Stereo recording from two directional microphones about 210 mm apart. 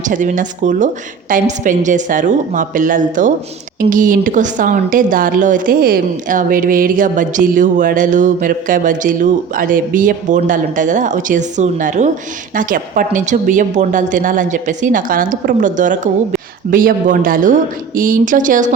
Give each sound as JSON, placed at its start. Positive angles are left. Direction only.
{"t": 0.1, "sound": "speech", "side_deg": -35}